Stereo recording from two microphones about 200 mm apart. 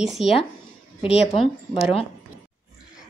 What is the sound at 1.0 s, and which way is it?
Speech, 30° left (ahead or behind).